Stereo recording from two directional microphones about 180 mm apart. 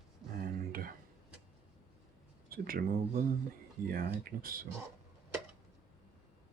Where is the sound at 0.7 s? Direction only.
55° right (ahead or behind).